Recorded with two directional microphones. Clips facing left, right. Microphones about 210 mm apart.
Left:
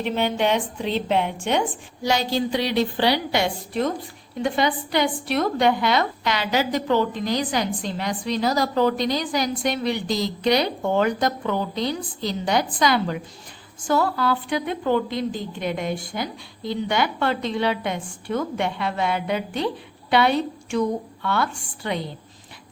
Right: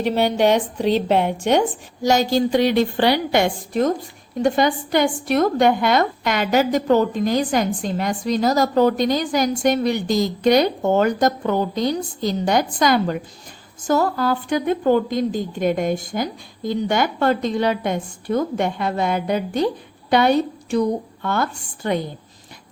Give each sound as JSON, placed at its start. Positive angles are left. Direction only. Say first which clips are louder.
{"t": 0.0, "sound": "a woman's voice", "louder": "right 5 dB", "side_deg": -40}